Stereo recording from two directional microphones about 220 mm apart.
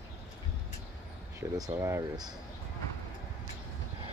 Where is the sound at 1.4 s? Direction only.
15° right (ahead or behind).